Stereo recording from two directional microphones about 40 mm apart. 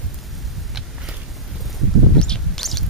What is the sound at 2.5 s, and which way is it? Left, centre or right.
Bird, centre.